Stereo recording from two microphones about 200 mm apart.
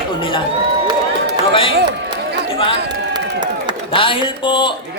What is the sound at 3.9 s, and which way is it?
Speech, 25° left (ahead or behind).